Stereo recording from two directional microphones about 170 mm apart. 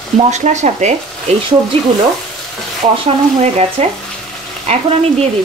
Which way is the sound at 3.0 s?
35° right (ahead or behind).